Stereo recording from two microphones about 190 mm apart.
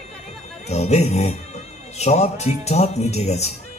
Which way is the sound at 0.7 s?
35° left (ahead or behind).